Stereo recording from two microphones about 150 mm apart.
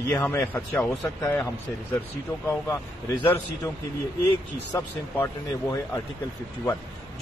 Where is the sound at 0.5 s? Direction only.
10° left (ahead or behind).